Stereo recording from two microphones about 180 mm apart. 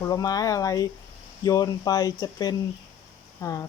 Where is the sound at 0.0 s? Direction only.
20° left (ahead or behind).